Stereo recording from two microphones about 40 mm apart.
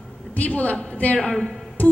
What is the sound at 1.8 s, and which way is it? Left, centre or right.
Music, left.